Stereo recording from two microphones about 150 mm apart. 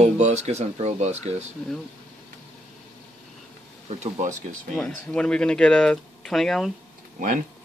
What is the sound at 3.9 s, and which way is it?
Speech, 50° right (ahead or behind).